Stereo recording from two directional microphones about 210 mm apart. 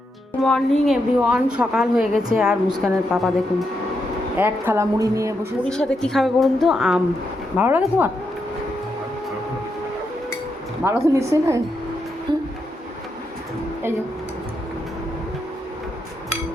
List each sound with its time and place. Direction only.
0.4 s a woman's voice: 5° left (ahead or behind)
4.4 s a woman's voice: 10° right (ahead or behind)
5.6 s a woman's voice: 5° left (ahead or behind)
10.8 s a woman's voice: 15° right (ahead or behind)
12.3 s a sound: 20° right (ahead or behind)